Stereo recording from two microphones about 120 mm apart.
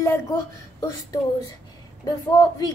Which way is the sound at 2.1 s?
35° left (ahead or behind).